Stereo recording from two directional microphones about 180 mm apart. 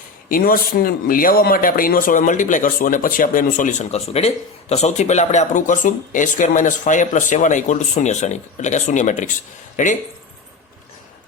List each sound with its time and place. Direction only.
0.3 s speech: 50° left (ahead or behind)